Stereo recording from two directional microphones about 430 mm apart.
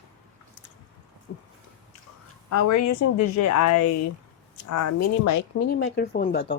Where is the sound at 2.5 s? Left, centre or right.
Left.